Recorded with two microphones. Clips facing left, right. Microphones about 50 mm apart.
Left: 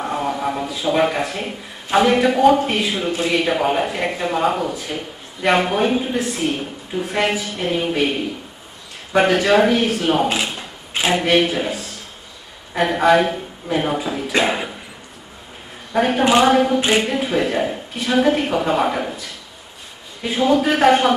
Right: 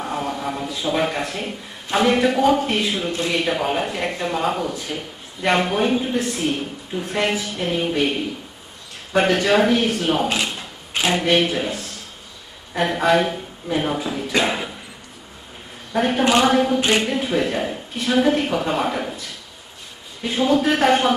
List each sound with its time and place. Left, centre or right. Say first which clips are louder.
0.0 s a man's voice: left 3 dB; centre
10.9 s a sound: left 2 dB; centre
11.1 s speech: left 2 dB; centre
15.9 s a man's voice: left 2 dB; centre
20.2 s speech: left 2 dB; centre